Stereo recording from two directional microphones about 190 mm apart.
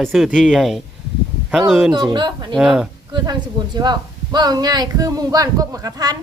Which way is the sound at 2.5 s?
Centre (ahead or behind).